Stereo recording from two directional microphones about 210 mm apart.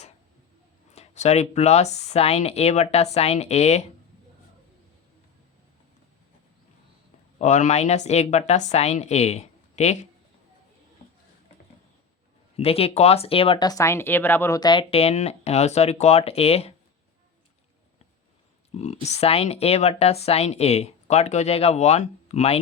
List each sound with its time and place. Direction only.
0.9 s speech: 30° left (ahead or behind)
7.3 s speech: 35° left (ahead or behind)
12.5 s speech: 30° left (ahead or behind)
18.7 s speech: 30° left (ahead or behind)